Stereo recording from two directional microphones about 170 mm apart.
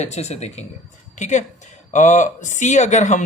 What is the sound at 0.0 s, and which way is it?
Speech, 40° left (ahead or behind).